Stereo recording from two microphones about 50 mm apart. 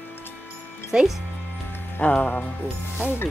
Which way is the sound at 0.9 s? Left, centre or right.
Right.